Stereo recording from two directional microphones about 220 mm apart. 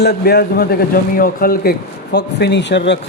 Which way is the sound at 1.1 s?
40° left (ahead or behind).